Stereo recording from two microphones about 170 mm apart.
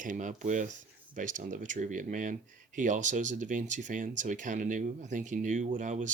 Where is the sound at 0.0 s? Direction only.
50° right (ahead or behind).